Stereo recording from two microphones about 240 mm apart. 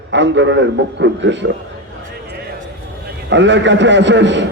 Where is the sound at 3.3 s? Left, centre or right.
Right.